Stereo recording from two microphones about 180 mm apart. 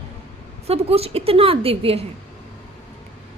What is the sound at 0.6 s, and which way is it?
A woman's voice, 35° right (ahead or behind).